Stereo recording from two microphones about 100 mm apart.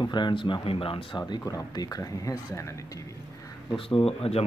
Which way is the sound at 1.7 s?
40° left (ahead or behind).